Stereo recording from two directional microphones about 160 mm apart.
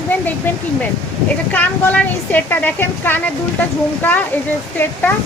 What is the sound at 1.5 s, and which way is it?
A woman's voice, 10° left (ahead or behind).